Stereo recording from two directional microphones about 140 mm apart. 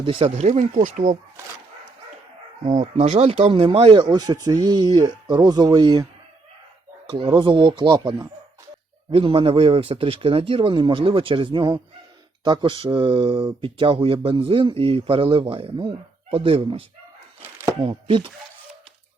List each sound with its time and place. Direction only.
0.0 s speech: 40° right (ahead or behind)
0.4 s speech: 55° right (ahead or behind)
2.8 s speech: 50° right (ahead or behind); by 6.1 s 30° right (ahead or behind)
7.3 s speech: 35° right (ahead or behind)
9.1 s speech: 40° right (ahead or behind)
17.4 s chopping: 15° right (ahead or behind)
17.8 s speech: 40° right (ahead or behind)